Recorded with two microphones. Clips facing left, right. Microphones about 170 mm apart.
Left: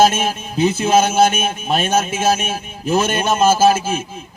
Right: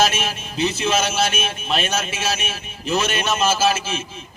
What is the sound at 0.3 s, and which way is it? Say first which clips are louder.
Speech: left 6 dB; 50° left (ahead or behind).